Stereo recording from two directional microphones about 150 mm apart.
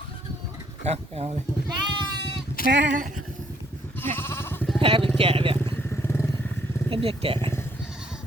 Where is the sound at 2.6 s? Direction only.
75° left (ahead or behind).